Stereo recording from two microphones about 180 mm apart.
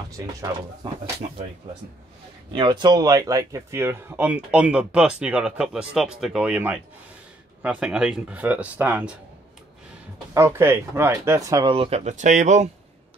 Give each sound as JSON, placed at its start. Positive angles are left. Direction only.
{"t": 0.4, "sound": "speech", "side_deg": -20}
{"t": 2.5, "sound": "speech", "side_deg": -25}
{"t": 10.3, "sound": "speech", "side_deg": -15}
{"t": 11.7, "sound": "speech", "side_deg": -35}